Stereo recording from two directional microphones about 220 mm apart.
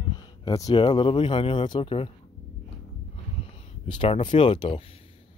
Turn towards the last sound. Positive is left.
turn(degrees=25)  # may be behind; listen again after turning